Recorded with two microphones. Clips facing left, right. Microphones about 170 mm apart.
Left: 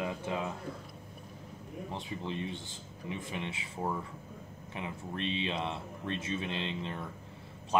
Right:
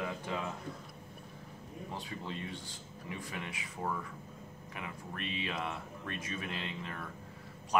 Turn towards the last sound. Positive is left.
turn(degrees=25)  # may be behind; listen again after turning